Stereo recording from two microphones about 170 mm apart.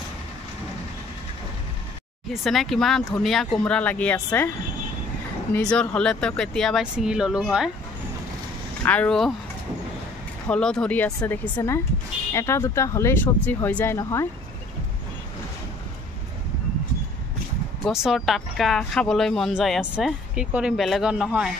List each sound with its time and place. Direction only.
2.4 s speech: centre (ahead or behind)
5.5 s speech: 5° left (ahead or behind)
8.8 s speech: 10° left (ahead or behind)
10.5 s speech: 5° left (ahead or behind)
17.8 s speech: centre (ahead or behind)